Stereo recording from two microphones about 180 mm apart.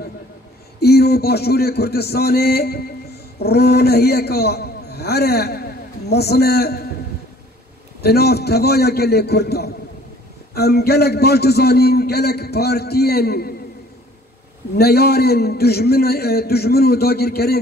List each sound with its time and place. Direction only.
0.7 s a man's voice: 60° left (ahead or behind)
8.0 s a man's voice: 60° left (ahead or behind)
14.8 s a man's voice: 60° left (ahead or behind)